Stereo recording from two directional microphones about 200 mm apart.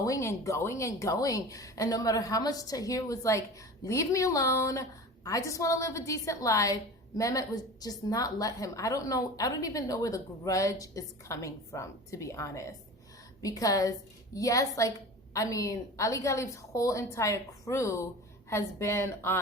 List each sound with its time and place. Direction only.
0.0 s a woman's voice: 15° left (ahead or behind)